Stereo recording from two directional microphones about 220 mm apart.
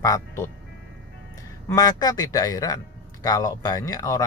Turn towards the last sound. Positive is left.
turn(degrees=15)  # may be behind; listen again after turning